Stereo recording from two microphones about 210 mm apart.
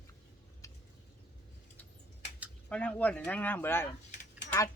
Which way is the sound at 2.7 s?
5° left (ahead or behind).